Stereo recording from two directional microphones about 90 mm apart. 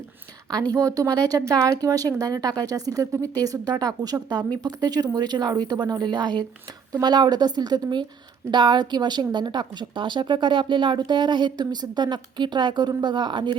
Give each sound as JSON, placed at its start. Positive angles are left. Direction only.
{"t": 0.7, "sound": "a woman's voice", "side_deg": -40}